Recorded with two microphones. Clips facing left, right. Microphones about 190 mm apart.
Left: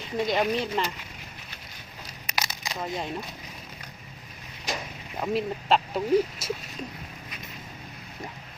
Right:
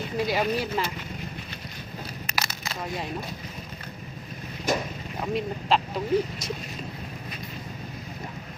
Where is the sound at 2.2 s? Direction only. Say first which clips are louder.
Left 2 dB; 15° left (ahead or behind).